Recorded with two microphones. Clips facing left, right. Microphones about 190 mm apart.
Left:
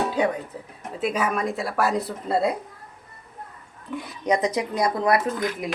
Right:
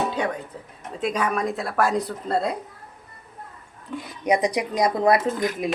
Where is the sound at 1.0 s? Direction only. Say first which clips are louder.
Even; 5° left (ahead or behind).